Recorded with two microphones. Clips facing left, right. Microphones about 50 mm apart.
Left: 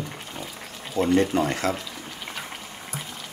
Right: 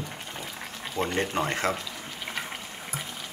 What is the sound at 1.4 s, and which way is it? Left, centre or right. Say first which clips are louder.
Speech: left 3 dB; right.